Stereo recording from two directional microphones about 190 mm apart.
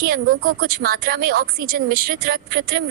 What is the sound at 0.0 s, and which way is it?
A woman's voice, 50° right (ahead or behind).